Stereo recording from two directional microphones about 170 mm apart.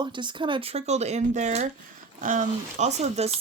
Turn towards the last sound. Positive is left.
turn(degrees=-40)  # may be behind; listen again after turning